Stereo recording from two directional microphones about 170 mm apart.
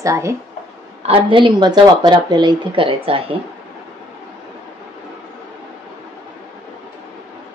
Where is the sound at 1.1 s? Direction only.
30° right (ahead or behind).